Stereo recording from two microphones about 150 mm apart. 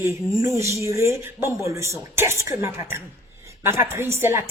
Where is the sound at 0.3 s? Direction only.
20° right (ahead or behind).